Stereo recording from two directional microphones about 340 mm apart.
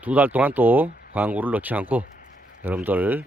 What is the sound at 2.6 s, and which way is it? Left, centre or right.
Speech, centre.